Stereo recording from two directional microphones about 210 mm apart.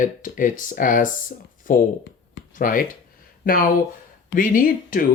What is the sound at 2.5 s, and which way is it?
Speech, 40° left (ahead or behind).